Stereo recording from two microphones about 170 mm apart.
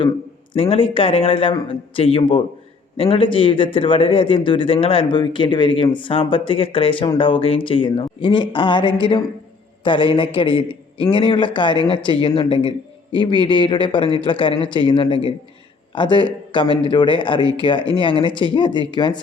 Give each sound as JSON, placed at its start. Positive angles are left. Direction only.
{"t": 0.5, "sound": "a man's voice", "side_deg": 30}